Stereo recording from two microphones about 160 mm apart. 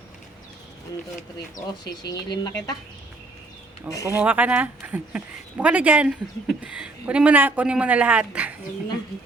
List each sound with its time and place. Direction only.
1.8 s speech: 25° left (ahead or behind)
3.8 s speech: 20° left (ahead or behind)
4.2 s speech: 10° right (ahead or behind)